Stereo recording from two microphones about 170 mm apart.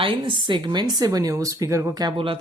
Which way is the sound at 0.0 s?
30° right (ahead or behind).